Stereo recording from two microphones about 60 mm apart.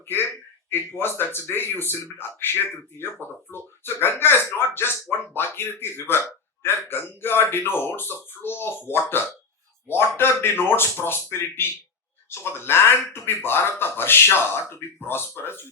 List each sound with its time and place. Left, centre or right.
0.7 s speech: left